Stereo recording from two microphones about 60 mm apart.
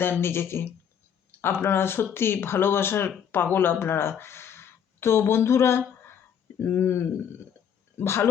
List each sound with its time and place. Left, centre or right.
0.0 s speech: left